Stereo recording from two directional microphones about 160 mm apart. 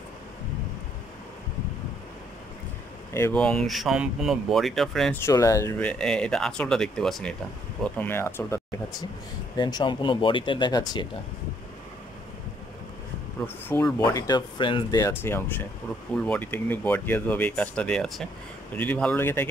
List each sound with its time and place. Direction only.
3.1 s speech: 15° left (ahead or behind)
3.4 s speech: centre (ahead or behind)
5.1 s speech: 20° left (ahead or behind)
5.9 s speech: 5° left (ahead or behind)
7.8 s speech: 15° left (ahead or behind)
9.6 s speech: 25° left (ahead or behind)
13.7 s speech: 15° left (ahead or behind)